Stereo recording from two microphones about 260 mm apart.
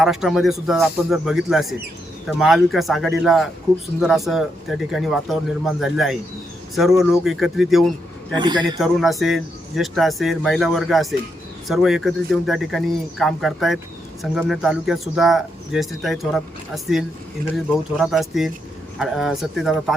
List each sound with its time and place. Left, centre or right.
0.0 s speech: centre
8.4 s a man's voice: centre
8.8 s speech: centre